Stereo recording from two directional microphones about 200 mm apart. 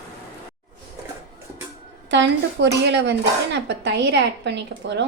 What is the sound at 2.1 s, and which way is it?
Speech, 60° right (ahead or behind).